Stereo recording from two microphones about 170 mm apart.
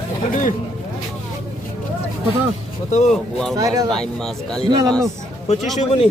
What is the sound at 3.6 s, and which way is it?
Speech, 20° right (ahead or behind).